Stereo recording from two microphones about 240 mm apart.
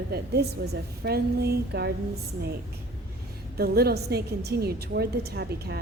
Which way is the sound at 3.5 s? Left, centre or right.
Right.